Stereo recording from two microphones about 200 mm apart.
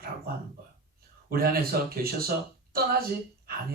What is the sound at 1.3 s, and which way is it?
Speech, 50° right (ahead or behind).